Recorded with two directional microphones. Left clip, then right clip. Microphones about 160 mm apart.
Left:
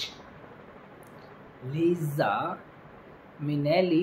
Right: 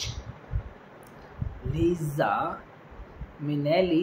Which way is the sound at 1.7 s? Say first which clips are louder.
Even; centre (ahead or behind).